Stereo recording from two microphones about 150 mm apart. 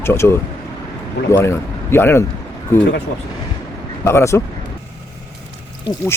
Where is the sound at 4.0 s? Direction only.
20° left (ahead or behind).